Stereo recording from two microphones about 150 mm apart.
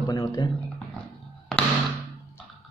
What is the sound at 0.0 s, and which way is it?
Speech, 25° left (ahead or behind).